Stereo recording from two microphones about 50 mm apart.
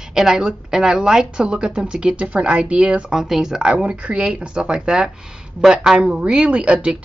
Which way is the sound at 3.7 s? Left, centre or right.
Right.